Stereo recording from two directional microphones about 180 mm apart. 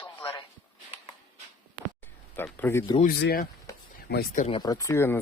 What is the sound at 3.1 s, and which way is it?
Speech, 60° left (ahead or behind).